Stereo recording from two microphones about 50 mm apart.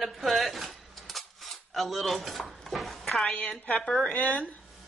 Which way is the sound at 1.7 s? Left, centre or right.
Centre.